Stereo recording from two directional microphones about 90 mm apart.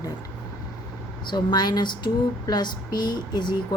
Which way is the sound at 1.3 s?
50° left (ahead or behind).